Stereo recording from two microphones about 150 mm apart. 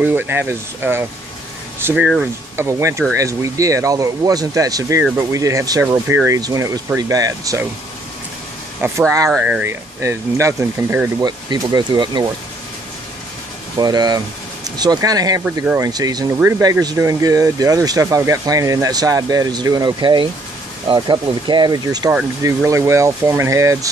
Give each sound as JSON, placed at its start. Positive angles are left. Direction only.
{"t": 0.0, "sound": "speech", "side_deg": -15}
{"t": 2.5, "sound": "speech", "side_deg": -20}
{"t": 8.8, "sound": "speech", "side_deg": -15}
{"t": 11.2, "sound": "speech", "side_deg": -25}
{"t": 13.7, "sound": "speech", "side_deg": -25}